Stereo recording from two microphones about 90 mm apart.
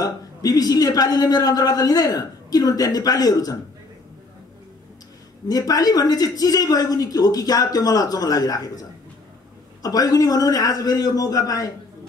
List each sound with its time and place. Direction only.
0.0 s a man's voice: 45° left (ahead or behind)
5.5 s a man's voice: 45° left (ahead or behind)